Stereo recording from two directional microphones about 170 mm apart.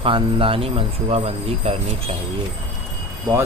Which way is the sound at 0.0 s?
30° right (ahead or behind).